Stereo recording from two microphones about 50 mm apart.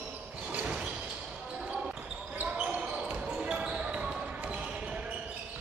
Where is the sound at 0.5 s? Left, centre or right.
Right.